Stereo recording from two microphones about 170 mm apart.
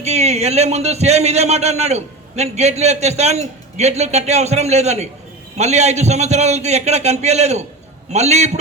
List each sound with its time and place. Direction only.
0.0 s a man's voice: 40° right (ahead or behind)